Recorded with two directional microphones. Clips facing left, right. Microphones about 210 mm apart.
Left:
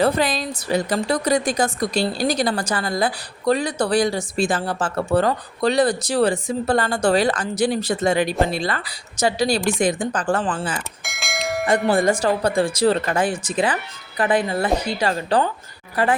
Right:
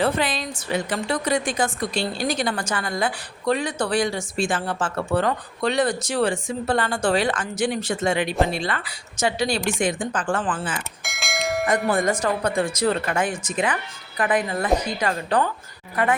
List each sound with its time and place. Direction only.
0.0 s a woman's voice: 40° left (ahead or behind)
11.0 s bell: centre (ahead or behind)
11.9 s a woman's voice: 30° left (ahead or behind)